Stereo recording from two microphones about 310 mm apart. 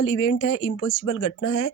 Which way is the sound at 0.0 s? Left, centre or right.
Left.